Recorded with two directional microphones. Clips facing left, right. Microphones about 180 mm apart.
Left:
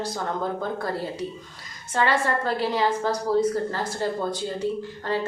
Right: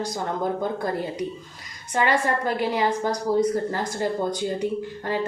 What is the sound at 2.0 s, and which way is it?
A woman's voice, 15° right (ahead or behind).